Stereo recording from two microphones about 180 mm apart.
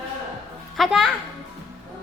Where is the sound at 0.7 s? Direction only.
Centre (ahead or behind).